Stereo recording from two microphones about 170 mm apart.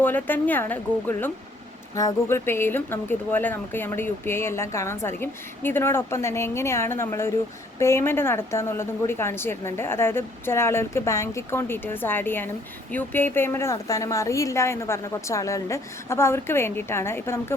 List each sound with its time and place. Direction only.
0.0 s a woman's voice: 10° left (ahead or behind)